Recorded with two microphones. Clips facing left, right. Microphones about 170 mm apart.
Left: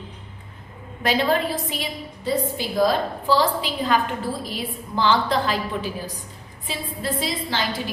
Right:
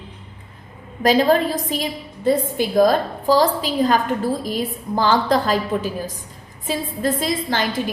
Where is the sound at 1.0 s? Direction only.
40° right (ahead or behind).